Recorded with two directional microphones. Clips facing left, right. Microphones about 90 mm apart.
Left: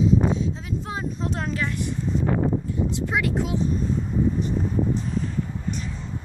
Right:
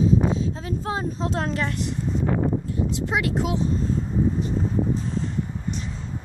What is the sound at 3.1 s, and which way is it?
Speech, 20° right (ahead or behind).